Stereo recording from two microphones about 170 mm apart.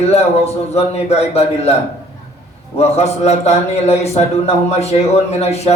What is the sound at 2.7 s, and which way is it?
A man's voice, 40° left (ahead or behind).